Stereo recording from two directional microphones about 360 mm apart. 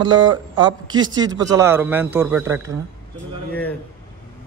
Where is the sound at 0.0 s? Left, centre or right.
Centre.